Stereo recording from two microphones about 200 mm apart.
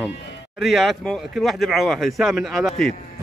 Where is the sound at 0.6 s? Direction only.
Centre (ahead or behind).